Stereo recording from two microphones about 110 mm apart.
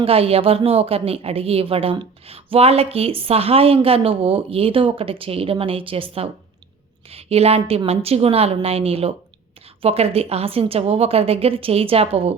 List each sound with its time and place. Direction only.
0.0 s speech: 60° right (ahead or behind)